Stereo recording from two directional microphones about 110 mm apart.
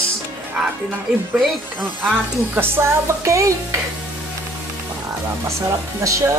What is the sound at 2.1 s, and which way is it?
Stir, 20° right (ahead or behind).